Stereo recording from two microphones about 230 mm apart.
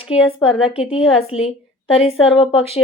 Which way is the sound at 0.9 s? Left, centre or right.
Left.